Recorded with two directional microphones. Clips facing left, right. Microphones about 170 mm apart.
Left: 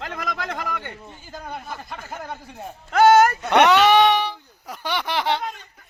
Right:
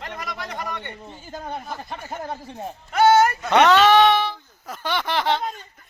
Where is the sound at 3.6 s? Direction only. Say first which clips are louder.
Even; 15° left (ahead or behind).